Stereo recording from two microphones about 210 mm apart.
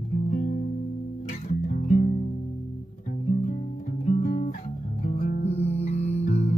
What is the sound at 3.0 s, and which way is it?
Guitar, 40° left (ahead or behind).